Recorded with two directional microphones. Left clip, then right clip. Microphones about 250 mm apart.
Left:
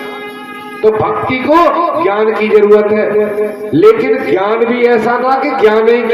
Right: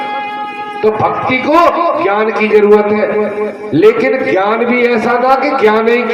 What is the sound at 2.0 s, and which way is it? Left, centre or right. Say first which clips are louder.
A man's voice: left 1 dB; right.